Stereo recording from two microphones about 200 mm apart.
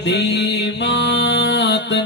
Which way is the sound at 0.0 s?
60° left (ahead or behind).